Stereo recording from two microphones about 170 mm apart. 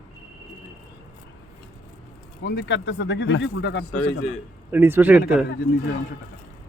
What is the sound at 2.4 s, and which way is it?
Speech, 90° left.